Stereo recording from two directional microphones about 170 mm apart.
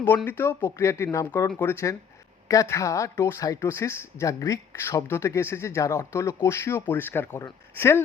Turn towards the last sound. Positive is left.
turn(degrees=15)  # may be behind; listen again after turning